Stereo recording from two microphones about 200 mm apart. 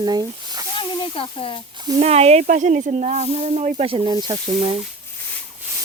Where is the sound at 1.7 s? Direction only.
20° right (ahead or behind).